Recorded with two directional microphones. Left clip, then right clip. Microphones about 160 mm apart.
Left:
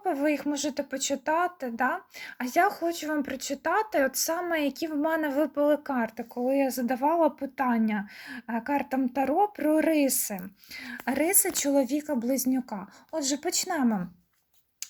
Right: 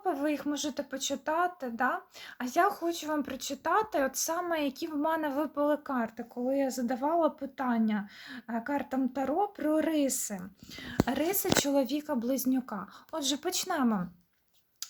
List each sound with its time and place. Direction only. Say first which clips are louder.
0.0 s speech: left 4 dB; 20° left (ahead or behind)